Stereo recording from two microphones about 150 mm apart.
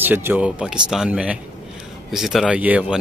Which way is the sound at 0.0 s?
15° right (ahead or behind).